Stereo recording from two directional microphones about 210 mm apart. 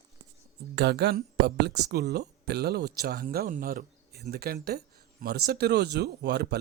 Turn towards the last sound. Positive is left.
turn(degrees=-50)  # may be behind; listen again after turning